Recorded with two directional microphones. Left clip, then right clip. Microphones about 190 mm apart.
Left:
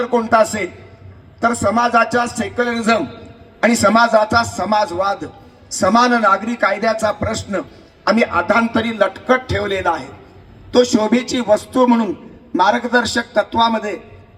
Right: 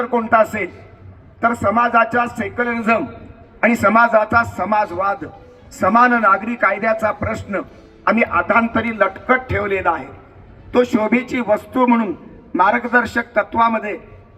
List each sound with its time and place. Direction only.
0.0 s speech: 40° left (ahead or behind)